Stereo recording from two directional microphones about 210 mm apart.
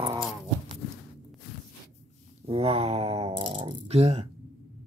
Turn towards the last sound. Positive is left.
turn(degrees=-30)  # may be behind; listen again after turning